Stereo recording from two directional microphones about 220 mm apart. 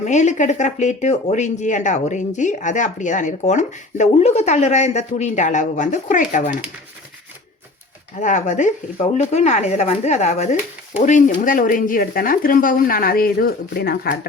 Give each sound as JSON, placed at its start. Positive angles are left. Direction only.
{"t": 0.0, "sound": "speech", "side_deg": 35}
{"t": 8.2, "sound": "speech", "side_deg": 35}